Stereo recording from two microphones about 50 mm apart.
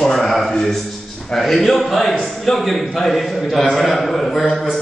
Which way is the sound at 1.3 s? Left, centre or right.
Centre.